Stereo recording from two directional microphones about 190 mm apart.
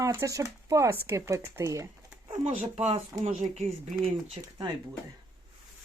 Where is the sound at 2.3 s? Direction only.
35° right (ahead or behind).